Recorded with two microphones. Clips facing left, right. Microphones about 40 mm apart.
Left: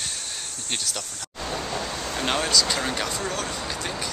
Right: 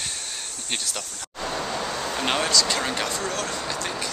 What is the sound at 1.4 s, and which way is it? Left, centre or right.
Vehicle, centre.